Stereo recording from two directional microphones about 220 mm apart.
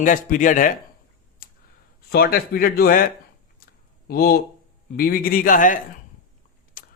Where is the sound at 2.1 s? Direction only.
45° left (ahead or behind).